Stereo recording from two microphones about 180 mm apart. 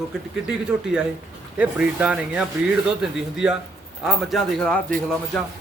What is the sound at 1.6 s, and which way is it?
A man's voice, 5° right (ahead or behind).